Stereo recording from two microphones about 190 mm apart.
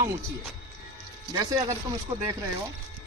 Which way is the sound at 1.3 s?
20° right (ahead or behind).